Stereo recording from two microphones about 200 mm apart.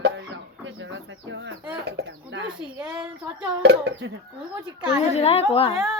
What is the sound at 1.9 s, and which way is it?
Speech, 60° right (ahead or behind).